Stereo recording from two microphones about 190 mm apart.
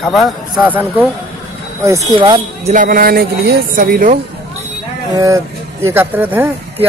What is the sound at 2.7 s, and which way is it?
Speech, 45° right (ahead or behind).